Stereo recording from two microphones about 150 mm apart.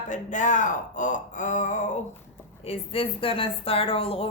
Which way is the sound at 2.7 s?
40° left (ahead or behind).